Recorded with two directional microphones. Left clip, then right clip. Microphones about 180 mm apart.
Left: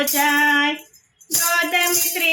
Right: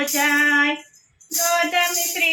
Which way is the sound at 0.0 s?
30° left (ahead or behind).